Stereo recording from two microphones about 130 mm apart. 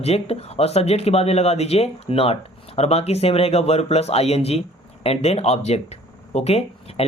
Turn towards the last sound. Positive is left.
turn(degrees=50)  # may be behind; listen again after turning